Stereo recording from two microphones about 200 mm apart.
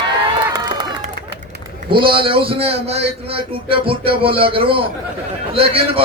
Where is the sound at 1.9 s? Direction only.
25° right (ahead or behind).